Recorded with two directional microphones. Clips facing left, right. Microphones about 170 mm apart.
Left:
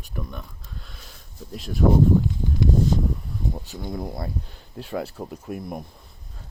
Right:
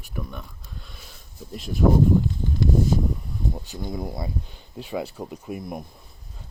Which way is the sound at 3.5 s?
Centre (ahead or behind).